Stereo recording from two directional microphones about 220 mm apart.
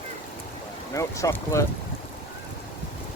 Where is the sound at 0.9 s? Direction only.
15° left (ahead or behind).